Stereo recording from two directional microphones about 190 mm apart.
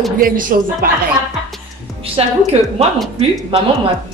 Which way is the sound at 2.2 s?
30° right (ahead or behind).